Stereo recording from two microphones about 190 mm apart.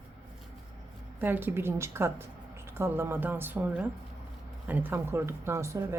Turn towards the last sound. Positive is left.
turn(degrees=-15)  # may be behind; listen again after turning